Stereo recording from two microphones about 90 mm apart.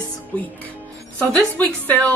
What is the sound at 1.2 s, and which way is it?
Speech, 20° left (ahead or behind).